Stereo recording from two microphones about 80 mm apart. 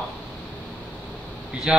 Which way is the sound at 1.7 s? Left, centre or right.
Centre.